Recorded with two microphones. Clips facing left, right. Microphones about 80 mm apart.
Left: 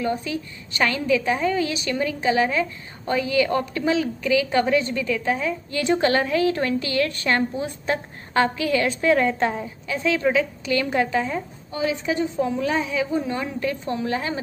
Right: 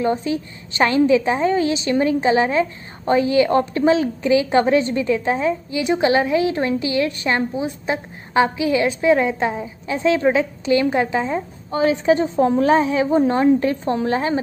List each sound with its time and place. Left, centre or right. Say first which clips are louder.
0.0 s a woman's voice: right 5 dB; right
5.7 s a woman's voice: right 1 dB; centre
9.8 s a woman's voice: right 5 dB; right
11.7 s a woman's voice: right 8 dB; right